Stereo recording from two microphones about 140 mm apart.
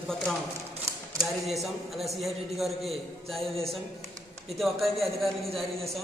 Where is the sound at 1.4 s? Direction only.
Centre (ahead or behind).